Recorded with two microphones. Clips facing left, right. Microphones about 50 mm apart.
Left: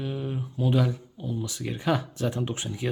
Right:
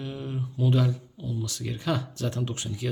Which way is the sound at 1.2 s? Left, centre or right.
Left.